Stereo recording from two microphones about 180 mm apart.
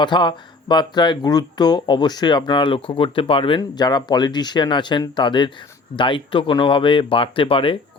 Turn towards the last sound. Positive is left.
turn(degrees=30)  # may be behind; listen again after turning